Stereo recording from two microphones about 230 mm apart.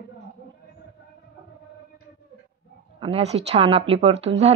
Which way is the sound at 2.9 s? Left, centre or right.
Right.